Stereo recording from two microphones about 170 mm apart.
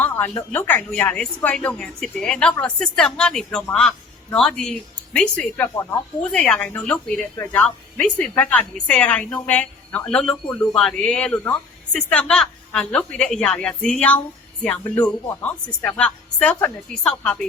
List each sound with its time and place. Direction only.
0.5 s a woman's voice: 10° left (ahead or behind)